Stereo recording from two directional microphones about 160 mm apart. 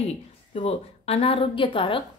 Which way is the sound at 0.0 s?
40° left (ahead or behind).